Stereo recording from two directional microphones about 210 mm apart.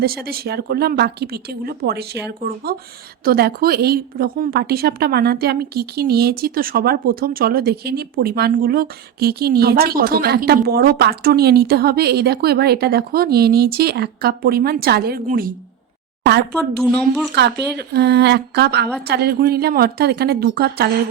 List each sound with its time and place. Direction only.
0.0 s a woman's voice: 45° right (ahead or behind)
16.6 s speech: 5° left (ahead or behind)
17.3 s a woman's voice: 50° right (ahead or behind)